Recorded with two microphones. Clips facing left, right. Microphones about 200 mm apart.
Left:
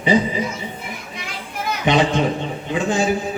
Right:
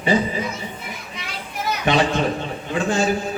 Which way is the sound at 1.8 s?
15° left (ahead or behind).